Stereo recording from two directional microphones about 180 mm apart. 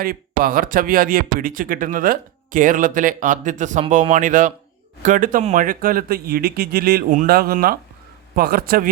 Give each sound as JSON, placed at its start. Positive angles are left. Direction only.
{"t": 0.0, "sound": "a man's voice", "side_deg": -50}